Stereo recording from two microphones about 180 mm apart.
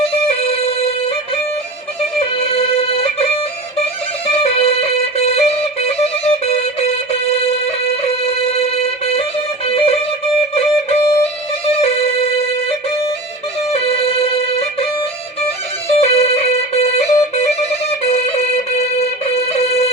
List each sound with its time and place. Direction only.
0.0 s music: 35° left (ahead or behind)
3.0 s music: 35° left (ahead or behind)
4.4 s music: 35° left (ahead or behind)
13.8 s music: 35° left (ahead or behind)
16.0 s music: 35° left (ahead or behind)